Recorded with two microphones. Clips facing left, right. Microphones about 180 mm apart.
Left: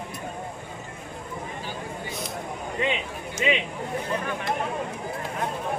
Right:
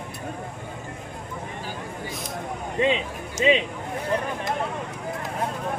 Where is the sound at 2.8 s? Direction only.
30° right (ahead or behind).